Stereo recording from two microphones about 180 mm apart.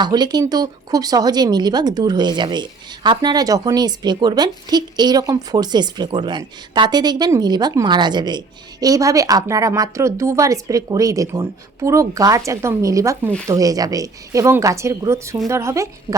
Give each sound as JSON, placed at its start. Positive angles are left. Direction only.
{"t": 0.0, "sound": "speech", "side_deg": -25}